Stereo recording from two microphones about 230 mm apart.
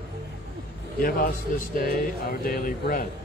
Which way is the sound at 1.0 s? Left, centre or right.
Left.